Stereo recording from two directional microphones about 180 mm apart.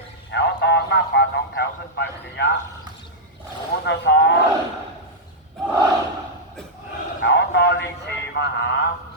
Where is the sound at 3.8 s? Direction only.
80° left.